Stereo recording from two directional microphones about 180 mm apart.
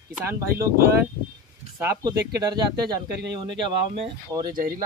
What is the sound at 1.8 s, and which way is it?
Speech, 15° right (ahead or behind).